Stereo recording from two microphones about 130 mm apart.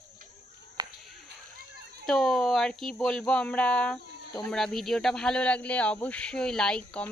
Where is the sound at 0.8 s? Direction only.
30° right (ahead or behind).